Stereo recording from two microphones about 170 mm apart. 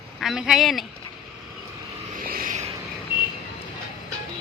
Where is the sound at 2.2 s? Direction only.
55° right (ahead or behind).